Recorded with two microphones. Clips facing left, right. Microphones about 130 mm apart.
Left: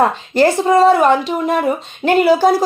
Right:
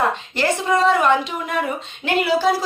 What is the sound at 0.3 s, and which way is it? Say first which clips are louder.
Speech: left 9 dB; 35° left (ahead or behind).